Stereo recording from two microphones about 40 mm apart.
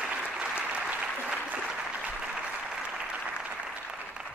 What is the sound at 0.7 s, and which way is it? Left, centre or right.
Applause, right.